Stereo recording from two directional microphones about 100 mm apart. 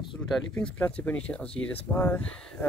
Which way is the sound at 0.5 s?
15° left (ahead or behind).